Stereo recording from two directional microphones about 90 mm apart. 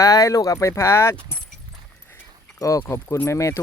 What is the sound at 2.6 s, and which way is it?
Speech, 40° left (ahead or behind).